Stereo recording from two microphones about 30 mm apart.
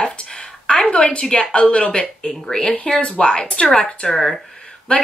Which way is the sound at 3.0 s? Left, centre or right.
Left.